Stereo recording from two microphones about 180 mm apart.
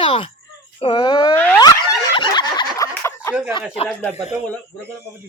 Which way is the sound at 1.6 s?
25° left (ahead or behind).